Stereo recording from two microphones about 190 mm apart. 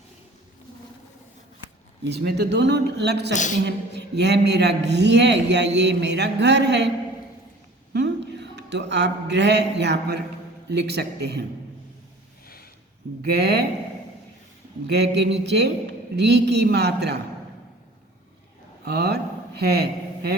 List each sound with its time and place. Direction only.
2.0 s a man's voice: 60° right (ahead or behind)
3.3 s a woman's voice: 40° left (ahead or behind)
3.7 s a man's voice: 60° right (ahead or behind)
7.9 s a man's voice: 65° right (ahead or behind)
13.2 s a man's voice: 60° right (ahead or behind)
14.8 s a man's voice: 60° right (ahead or behind)
18.9 s a man's voice: 60° right (ahead or behind)